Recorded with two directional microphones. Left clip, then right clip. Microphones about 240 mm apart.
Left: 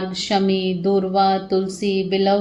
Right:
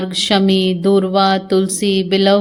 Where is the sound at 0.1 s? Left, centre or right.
Right.